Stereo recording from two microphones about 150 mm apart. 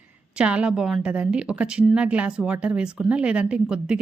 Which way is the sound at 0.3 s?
5° right (ahead or behind).